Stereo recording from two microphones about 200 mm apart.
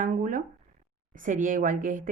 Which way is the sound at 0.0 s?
40° right (ahead or behind).